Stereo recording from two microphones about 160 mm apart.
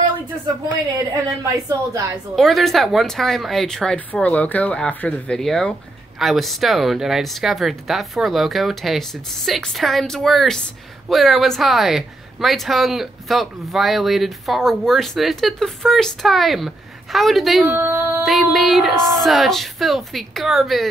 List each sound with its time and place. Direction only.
1.2 s a woman's voice: 20° right (ahead or behind)
2.3 s speech: centre (ahead or behind)
17.7 s a sound: 15° right (ahead or behind)
18.2 s speech: centre (ahead or behind)